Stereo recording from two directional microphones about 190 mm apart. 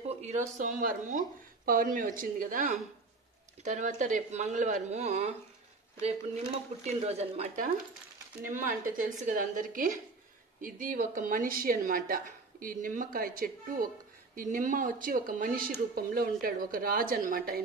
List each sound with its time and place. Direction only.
0.1 s a woman's voice: 35° right (ahead or behind)